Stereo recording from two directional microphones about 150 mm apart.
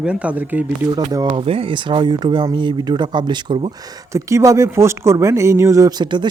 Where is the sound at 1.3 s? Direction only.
40° right (ahead or behind).